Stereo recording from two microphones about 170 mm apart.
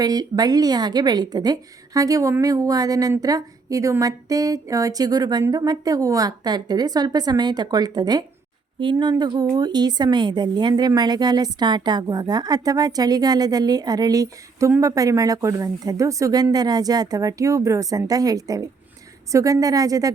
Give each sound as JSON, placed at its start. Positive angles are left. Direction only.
{"t": 0.0, "sound": "a woman's voice", "side_deg": -25}